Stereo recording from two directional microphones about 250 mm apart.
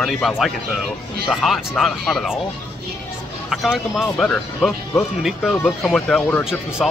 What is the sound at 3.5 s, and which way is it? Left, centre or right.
A man's voice, centre.